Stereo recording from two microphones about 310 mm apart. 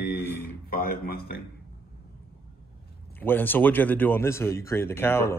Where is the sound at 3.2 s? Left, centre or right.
Centre.